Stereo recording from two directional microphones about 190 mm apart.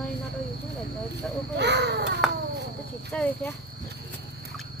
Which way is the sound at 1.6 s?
65° right (ahead or behind).